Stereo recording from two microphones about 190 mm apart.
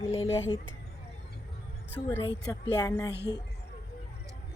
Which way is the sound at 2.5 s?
20° left (ahead or behind).